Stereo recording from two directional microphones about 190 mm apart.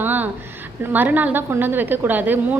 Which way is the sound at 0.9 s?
10° right (ahead or behind).